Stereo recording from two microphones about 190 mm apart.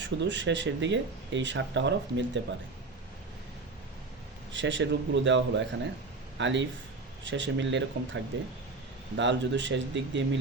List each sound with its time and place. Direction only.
0.0 s speech: 70° right (ahead or behind)
4.5 s speech: 70° right (ahead or behind)